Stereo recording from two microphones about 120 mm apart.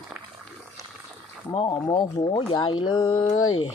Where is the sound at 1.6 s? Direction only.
35° left (ahead or behind).